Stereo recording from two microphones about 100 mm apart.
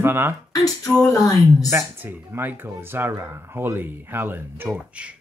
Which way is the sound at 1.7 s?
25° right (ahead or behind).